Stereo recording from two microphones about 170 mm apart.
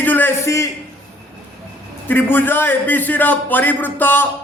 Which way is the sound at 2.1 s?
10° left (ahead or behind).